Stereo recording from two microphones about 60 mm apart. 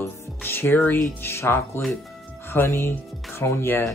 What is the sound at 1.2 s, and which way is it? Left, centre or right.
Music, left.